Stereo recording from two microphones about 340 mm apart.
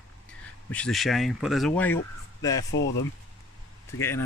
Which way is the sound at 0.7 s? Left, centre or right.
Centre.